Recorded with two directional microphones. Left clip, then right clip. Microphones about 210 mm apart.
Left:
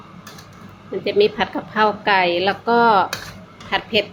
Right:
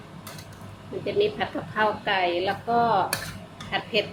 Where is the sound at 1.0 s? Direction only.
25° left (ahead or behind).